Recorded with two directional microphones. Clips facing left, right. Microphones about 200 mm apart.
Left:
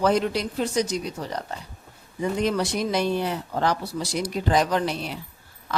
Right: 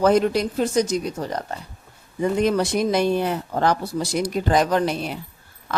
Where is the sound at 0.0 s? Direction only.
45° right (ahead or behind).